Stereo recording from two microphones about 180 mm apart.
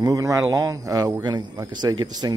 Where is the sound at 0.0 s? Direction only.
20° right (ahead or behind).